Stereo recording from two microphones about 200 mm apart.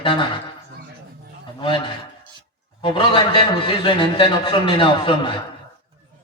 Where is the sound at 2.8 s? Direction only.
25° left (ahead or behind).